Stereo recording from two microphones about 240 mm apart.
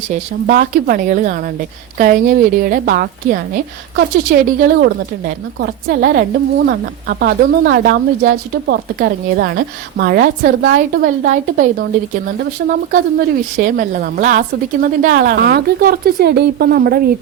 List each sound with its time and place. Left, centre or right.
0.1 s a woman's voice: right